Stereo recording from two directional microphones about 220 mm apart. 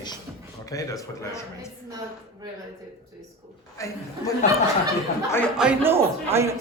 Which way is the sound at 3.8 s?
15° left (ahead or behind).